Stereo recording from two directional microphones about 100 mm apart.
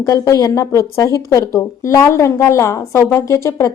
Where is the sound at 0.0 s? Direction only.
35° left (ahead or behind).